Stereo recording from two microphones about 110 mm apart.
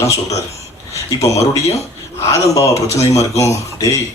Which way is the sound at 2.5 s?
30° left (ahead or behind).